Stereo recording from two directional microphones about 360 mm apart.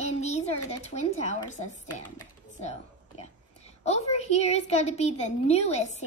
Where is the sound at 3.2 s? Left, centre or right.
Centre.